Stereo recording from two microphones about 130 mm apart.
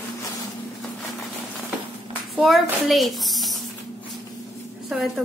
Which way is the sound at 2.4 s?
Centre (ahead or behind).